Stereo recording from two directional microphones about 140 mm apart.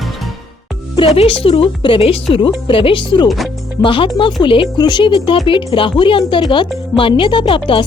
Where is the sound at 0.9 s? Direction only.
45° left (ahead or behind).